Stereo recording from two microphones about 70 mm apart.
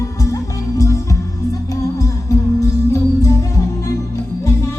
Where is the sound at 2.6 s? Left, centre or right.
Left.